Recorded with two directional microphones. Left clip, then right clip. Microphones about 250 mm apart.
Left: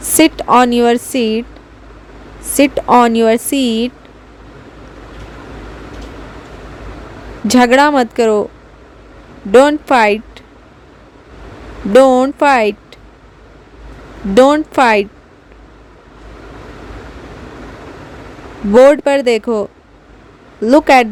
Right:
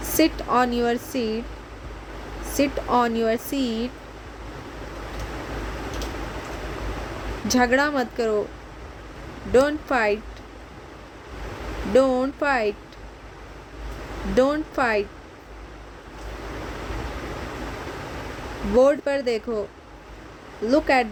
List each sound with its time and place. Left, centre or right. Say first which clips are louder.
0.2 s speech: left 11 dB; left
2.6 s speech: left 12 dB; left
7.5 s speech: left 11 dB; left
9.5 s speech: left 11 dB; left
11.9 s speech: left 12 dB; left
14.3 s speech: left 12 dB; left
18.8 s speech: left 11 dB; left
20.7 s speech: left 12 dB; left